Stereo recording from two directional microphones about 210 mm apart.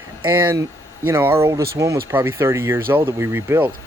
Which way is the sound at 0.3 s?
10° right (ahead or behind).